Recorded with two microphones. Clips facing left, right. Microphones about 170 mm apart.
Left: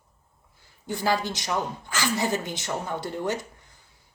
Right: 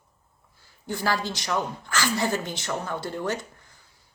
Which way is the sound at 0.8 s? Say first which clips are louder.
Left 1 dB; 20° left (ahead or behind).